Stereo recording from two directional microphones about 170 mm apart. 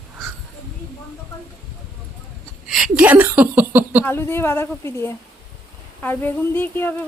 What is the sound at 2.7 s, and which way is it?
Speech, 5° right (ahead or behind).